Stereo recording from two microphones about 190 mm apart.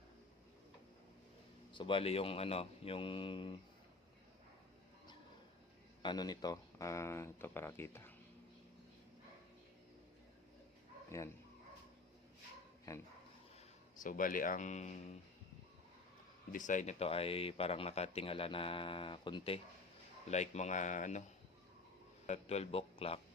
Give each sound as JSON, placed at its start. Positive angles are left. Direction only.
{"t": 1.7, "sound": "speech", "side_deg": 25}
{"t": 6.0, "sound": "speech", "side_deg": 20}
{"t": 12.9, "sound": "speech", "side_deg": 15}
{"t": 14.0, "sound": "speech", "side_deg": 45}
{"t": 16.5, "sound": "speech", "side_deg": 40}
{"t": 20.3, "sound": "speech", "side_deg": 35}
{"t": 22.3, "sound": "speech", "side_deg": 35}